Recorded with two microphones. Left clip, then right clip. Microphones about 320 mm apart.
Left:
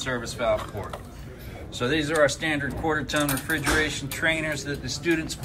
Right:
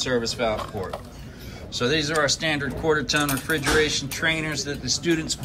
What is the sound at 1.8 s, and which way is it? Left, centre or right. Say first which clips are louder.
Speech: even; centre.